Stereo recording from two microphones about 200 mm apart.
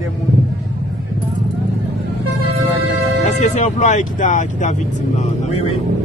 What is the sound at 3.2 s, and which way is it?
Speech, 35° left (ahead or behind).